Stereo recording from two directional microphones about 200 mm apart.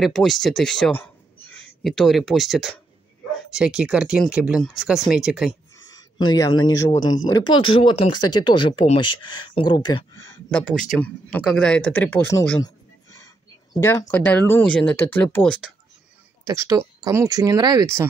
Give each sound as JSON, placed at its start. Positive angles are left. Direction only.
{"t": 0.0, "sound": "speech", "side_deg": 0}
{"t": 5.5, "sound": "a sound", "side_deg": 20}
{"t": 6.6, "sound": "speech", "side_deg": 20}
{"t": 16.4, "sound": "speech", "side_deg": -15}